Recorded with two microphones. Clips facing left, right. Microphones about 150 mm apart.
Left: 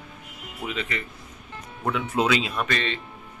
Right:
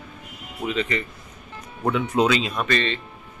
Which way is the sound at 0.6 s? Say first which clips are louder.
Right 6 dB; 5° left (ahead or behind).